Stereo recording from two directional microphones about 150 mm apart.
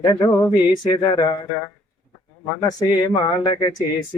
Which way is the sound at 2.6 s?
25° left (ahead or behind).